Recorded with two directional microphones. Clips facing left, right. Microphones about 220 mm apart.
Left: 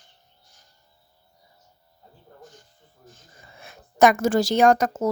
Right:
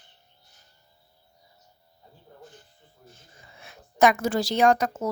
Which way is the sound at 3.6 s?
45° left (ahead or behind).